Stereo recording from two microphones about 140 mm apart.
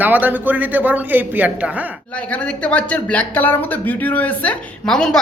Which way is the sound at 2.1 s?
10° left (ahead or behind).